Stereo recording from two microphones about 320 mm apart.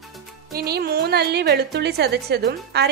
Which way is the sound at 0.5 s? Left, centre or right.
Right.